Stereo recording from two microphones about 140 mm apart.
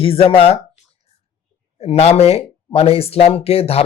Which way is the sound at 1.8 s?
45° left (ahead or behind).